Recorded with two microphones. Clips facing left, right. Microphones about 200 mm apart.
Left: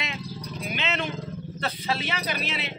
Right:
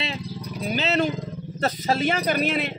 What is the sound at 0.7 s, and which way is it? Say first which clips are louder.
A man's voice: right 8 dB; 40° right (ahead or behind).